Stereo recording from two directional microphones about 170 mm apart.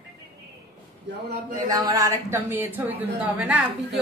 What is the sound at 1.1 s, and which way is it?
Speech, 90° right.